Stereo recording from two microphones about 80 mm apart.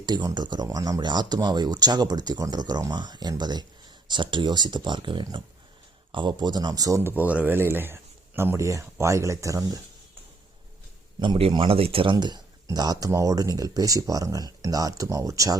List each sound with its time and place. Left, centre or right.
0.0 s speech: right
4.1 s speech: right
7.0 s speech: right
11.2 s speech: right
13.1 s speech: right